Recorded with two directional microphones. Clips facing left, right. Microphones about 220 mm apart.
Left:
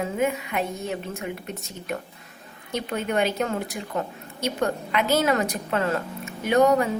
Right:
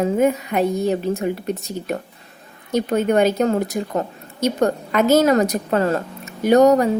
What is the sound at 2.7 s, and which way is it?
A woman's voice, 45° right (ahead or behind).